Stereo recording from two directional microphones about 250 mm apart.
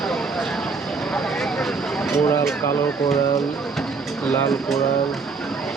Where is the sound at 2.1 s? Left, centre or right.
Centre.